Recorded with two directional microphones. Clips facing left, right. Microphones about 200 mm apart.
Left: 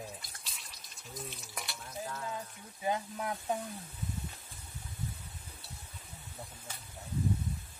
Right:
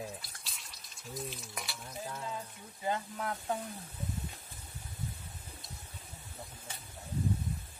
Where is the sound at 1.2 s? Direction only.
Centre (ahead or behind).